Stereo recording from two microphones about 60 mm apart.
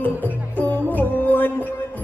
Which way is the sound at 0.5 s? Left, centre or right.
Left.